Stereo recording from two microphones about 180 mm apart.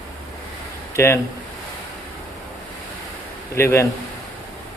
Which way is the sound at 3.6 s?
15° left (ahead or behind).